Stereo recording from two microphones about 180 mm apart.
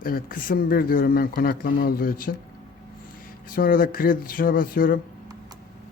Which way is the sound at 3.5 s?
55° left (ahead or behind).